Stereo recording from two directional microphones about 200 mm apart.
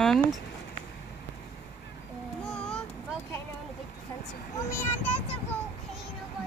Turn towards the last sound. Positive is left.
turn(degrees=10)  # may be behind; listen again after turning